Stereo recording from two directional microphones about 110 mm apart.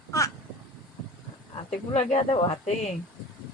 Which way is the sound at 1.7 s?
85° left.